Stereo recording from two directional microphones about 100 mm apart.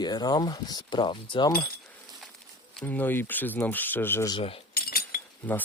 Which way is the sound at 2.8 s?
15° left (ahead or behind).